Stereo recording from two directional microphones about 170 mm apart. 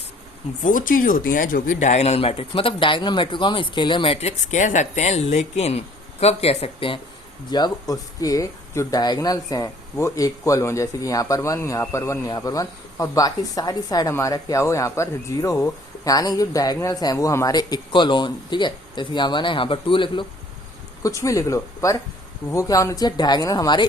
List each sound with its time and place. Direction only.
0.6 s speech: 55° left (ahead or behind); by 20.2 s 30° left (ahead or behind)
21.0 s speech: 20° left (ahead or behind)